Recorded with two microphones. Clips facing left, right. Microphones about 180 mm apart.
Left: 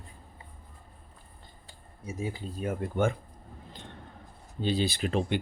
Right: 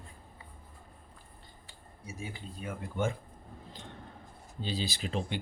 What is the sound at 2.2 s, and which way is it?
Speech, 45° left (ahead or behind).